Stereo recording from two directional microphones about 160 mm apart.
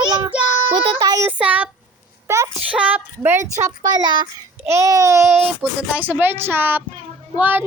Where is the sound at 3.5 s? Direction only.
25° right (ahead or behind).